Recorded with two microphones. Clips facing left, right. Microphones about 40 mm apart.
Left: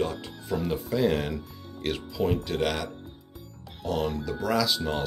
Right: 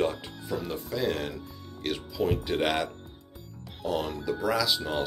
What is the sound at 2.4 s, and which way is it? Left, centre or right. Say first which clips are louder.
Speech: right 1 dB; centre.